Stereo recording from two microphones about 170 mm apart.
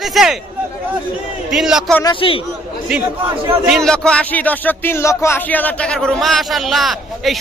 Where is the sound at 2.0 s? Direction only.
30° left (ahead or behind).